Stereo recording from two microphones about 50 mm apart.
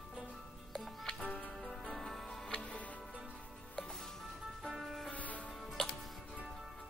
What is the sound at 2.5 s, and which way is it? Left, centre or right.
Music, left.